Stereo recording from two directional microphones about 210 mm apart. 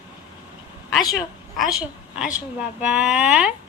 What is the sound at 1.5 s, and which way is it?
A woman's voice, 5° right (ahead or behind).